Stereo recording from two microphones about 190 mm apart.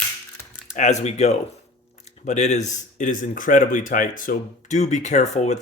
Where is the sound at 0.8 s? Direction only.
35° left (ahead or behind).